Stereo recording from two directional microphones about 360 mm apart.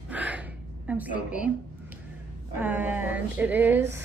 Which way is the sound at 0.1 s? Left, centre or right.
Centre.